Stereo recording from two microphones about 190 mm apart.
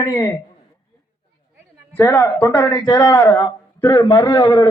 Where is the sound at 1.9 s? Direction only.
15° left (ahead or behind).